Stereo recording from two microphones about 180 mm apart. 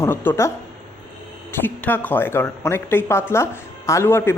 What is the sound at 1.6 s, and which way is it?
Speech, 10° left (ahead or behind).